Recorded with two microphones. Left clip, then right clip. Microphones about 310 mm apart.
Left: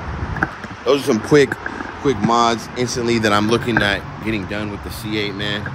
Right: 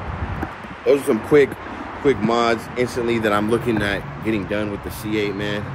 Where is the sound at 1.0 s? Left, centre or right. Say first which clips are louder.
Left 3 dB; left.